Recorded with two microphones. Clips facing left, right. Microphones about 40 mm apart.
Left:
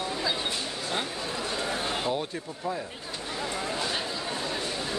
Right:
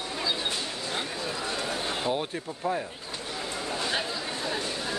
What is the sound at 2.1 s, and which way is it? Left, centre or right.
Speech, centre.